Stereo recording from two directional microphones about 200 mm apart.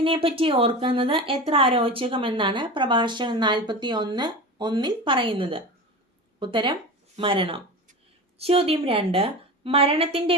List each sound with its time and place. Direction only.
0.0 s speech: 25° right (ahead or behind)